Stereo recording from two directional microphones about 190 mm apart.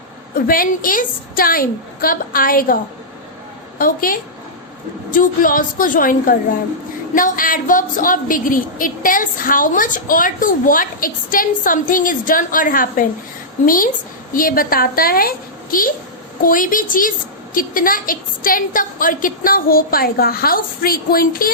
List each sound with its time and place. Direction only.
0.3 s a woman's voice: 50° left (ahead or behind)
3.8 s a woman's voice: 50° left (ahead or behind)